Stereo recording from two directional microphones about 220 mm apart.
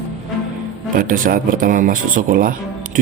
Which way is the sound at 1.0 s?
40° right (ahead or behind).